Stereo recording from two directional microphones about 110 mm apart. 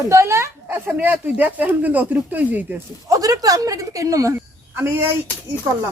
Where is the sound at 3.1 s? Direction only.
35° right (ahead or behind).